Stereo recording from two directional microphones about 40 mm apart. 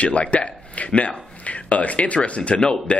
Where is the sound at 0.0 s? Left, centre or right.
Left.